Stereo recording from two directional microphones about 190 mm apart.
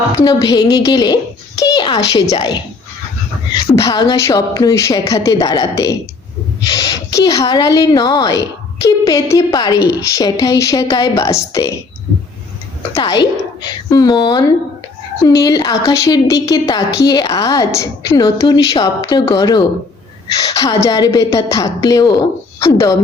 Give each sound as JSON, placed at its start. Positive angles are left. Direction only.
{"t": 0.3, "sound": "a woman's voice", "side_deg": 20}
{"t": 3.8, "sound": "a woman's voice", "side_deg": 20}
{"t": 12.9, "sound": "a woman's voice", "side_deg": 20}